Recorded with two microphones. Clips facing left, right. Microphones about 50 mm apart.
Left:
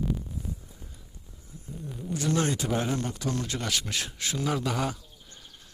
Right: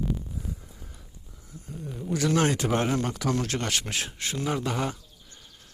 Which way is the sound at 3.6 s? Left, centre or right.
Right.